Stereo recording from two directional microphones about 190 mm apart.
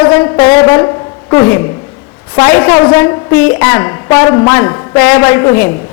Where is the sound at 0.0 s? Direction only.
20° left (ahead or behind).